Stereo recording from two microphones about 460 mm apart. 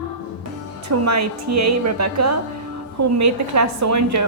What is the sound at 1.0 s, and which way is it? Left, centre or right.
A woman's voice, right.